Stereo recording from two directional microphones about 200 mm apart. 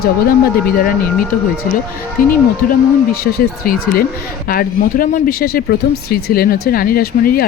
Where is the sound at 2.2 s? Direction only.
45° left (ahead or behind).